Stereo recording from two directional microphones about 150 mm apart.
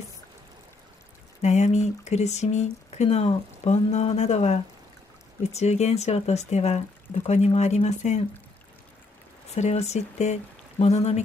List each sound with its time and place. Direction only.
1.4 s speech: 50° left (ahead or behind)
9.5 s speech: 45° left (ahead or behind)